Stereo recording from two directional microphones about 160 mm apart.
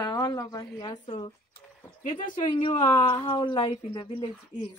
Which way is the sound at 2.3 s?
30° left (ahead or behind).